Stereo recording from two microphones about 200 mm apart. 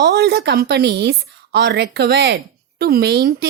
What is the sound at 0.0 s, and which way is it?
A woman's voice, 55° right (ahead or behind).